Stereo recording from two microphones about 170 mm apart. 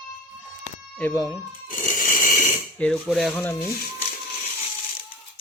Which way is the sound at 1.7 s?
55° left (ahead or behind).